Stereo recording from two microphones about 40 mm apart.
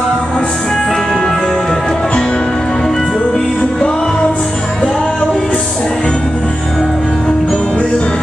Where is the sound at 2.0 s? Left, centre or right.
Left.